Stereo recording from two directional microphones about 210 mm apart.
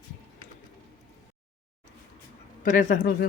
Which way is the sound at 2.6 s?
35° left (ahead or behind).